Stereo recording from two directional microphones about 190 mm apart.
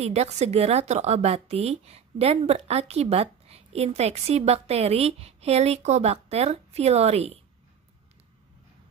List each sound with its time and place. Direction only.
0.0 s a woman's voice: 35° right (ahead or behind)